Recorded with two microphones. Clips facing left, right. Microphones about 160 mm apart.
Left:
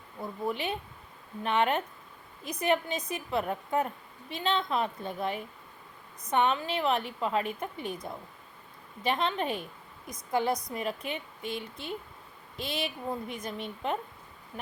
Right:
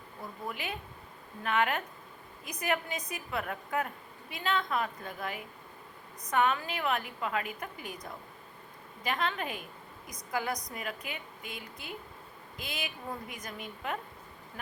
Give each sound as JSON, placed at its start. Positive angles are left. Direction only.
{"t": 0.4, "sound": "a woman's voice", "side_deg": 30}